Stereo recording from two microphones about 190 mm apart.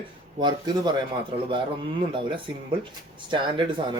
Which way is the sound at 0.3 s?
20° right (ahead or behind).